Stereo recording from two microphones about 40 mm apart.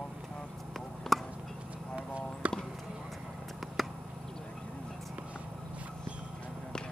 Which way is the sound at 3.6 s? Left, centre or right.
Centre.